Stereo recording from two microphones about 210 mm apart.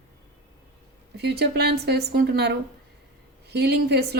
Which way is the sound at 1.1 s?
50° right (ahead or behind).